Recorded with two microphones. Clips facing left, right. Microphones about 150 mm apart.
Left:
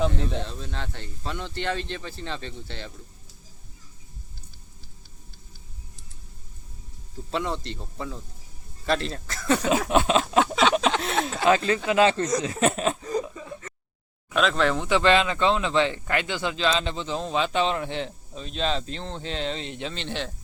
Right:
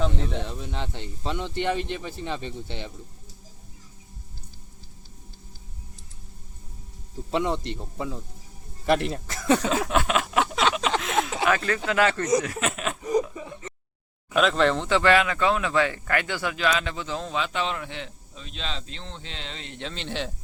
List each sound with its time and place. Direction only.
0.0 s speech: centre (ahead or behind)
0.3 s speech: 15° right (ahead or behind)
7.3 s speech: 15° right (ahead or behind)
9.6 s speech: 15° left (ahead or behind)
11.1 s speech: 10° right (ahead or behind)
11.4 s speech: 20° left (ahead or behind)
12.5 s chuckle: 35° left (ahead or behind)
13.0 s a sound: 15° right (ahead or behind)
14.3 s speech: centre (ahead or behind)
14.8 s speech: 20° left (ahead or behind); by 19.6 s 40° left (ahead or behind)
19.8 s speech: centre (ahead or behind)